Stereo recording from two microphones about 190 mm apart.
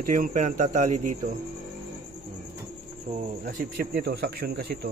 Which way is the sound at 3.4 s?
55° right (ahead or behind).